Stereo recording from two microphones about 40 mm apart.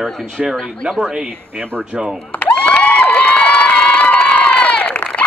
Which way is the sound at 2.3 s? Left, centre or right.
Left.